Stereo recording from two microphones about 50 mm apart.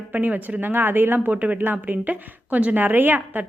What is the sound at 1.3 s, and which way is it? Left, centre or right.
A woman's voice, right.